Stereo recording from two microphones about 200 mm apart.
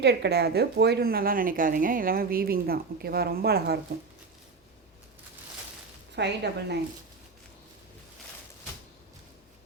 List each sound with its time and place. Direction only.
0.0 s a woman's voice: 55° right (ahead or behind)
6.1 s a woman's voice: 55° right (ahead or behind)